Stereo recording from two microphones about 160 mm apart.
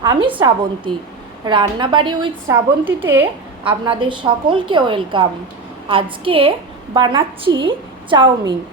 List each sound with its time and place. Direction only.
0.0 s a woman's voice: 30° right (ahead or behind)
2.5 s a woman's voice: 15° right (ahead or behind)
3.6 s a woman's voice: 30° right (ahead or behind)